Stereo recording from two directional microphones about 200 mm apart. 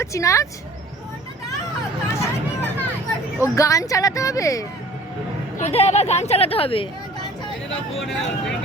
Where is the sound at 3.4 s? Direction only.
15° left (ahead or behind).